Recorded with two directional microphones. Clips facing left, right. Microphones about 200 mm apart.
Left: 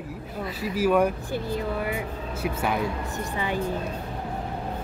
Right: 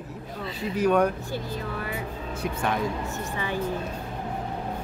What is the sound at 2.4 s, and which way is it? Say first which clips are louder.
Speech: left 1 dB; 5° left (ahead or behind).